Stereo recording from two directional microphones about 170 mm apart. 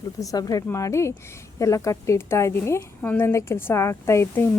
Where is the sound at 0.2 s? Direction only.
20° left (ahead or behind).